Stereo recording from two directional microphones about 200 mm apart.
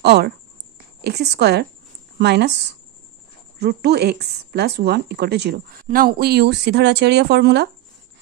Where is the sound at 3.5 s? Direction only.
55° right (ahead or behind).